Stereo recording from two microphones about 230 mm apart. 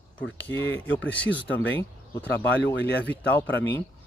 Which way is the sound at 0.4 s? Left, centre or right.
Left.